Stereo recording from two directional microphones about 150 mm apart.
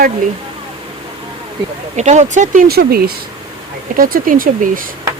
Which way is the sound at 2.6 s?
90° right.